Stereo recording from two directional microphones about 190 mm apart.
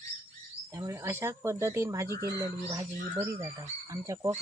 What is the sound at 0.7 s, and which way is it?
Speech, 15° right (ahead or behind).